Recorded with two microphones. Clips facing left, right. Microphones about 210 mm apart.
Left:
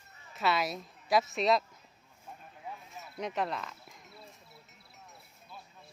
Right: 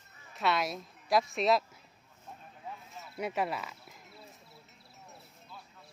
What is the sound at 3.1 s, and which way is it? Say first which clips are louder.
Speech: right 1 dB; 10° right (ahead or behind).